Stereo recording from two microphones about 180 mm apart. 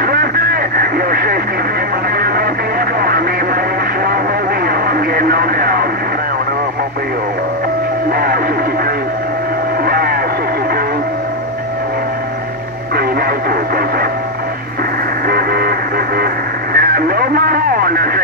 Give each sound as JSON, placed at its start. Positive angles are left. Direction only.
{"t": 0.0, "sound": "radio", "side_deg": -55}
{"t": 2.1, "sound": "music", "side_deg": -60}
{"t": 3.0, "sound": "radio", "side_deg": -55}
{"t": 4.6, "sound": "radio", "side_deg": -55}
{"t": 8.1, "sound": "music", "side_deg": -55}
{"t": 9.8, "sound": "vehicle", "side_deg": -55}
{"t": 12.9, "sound": "radio", "side_deg": -55}
{"t": 15.2, "sound": "vehicle", "side_deg": -60}
{"t": 16.7, "sound": "radio", "side_deg": -55}